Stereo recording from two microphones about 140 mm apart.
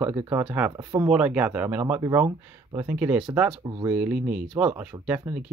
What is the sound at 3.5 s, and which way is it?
Speech, 40° right (ahead or behind).